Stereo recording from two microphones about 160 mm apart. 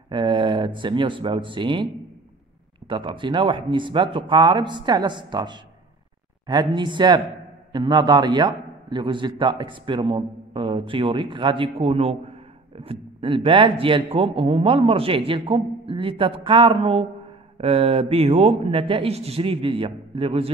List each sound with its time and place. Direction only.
0.1 s speech: 30° right (ahead or behind)
2.9 s a man's voice: 30° right (ahead or behind)